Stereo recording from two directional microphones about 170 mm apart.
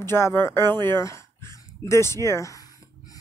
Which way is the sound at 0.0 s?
15° left (ahead or behind).